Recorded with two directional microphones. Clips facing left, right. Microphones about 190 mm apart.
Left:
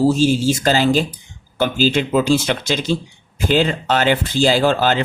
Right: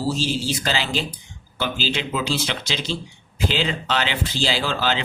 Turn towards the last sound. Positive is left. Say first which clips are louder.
# left 8 dB
turn(degrees=45)  # may be behind; listen again after turning